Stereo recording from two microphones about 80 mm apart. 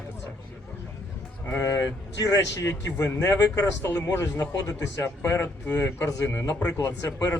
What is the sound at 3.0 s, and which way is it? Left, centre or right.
Speech, left.